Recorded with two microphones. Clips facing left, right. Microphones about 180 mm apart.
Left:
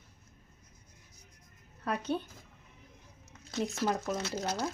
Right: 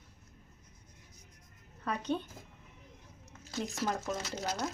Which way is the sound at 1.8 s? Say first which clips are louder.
Left 1 dB; 10° left (ahead or behind).